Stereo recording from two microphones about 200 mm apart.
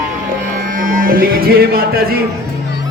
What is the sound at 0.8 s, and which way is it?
Music, 45° right (ahead or behind).